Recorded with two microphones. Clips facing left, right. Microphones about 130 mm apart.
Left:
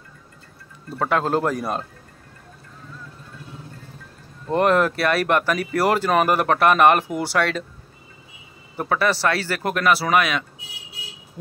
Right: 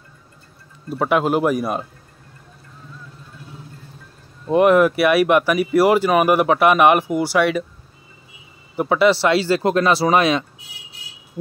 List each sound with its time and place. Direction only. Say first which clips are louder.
0.8 s speech: right 4 dB; 15° right (ahead or behind)
4.5 s speech: right 5 dB; 10° right (ahead or behind)
8.7 s speech: right 6 dB; 15° right (ahead or behind)